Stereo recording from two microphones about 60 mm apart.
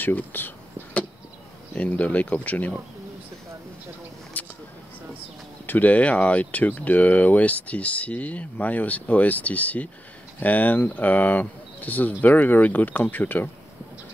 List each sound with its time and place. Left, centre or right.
0.0 s speech: left
1.8 s speech: left
4.4 s a sound: left
5.7 s speech: left